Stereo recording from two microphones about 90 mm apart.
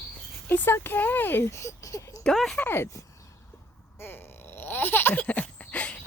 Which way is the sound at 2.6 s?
25° left (ahead or behind).